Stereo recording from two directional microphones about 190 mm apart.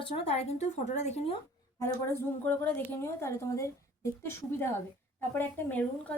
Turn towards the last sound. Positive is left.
turn(degrees=5)  # may be behind; listen again after turning